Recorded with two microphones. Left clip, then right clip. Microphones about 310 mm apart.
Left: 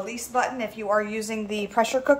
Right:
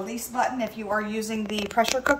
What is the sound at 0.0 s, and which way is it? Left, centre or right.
A woman's voice, centre.